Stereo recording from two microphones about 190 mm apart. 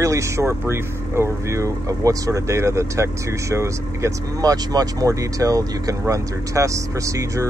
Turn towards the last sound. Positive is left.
turn(degrees=-15)  # may be behind; listen again after turning